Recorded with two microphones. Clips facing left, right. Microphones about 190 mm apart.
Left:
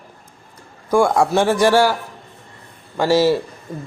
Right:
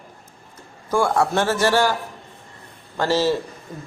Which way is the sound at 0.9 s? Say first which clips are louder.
Left 4 dB; 10° left (ahead or behind).